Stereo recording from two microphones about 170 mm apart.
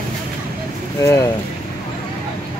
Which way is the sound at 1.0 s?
20° left (ahead or behind).